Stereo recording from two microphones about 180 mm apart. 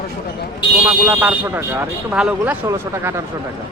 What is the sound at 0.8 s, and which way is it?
Speech, 10° right (ahead or behind).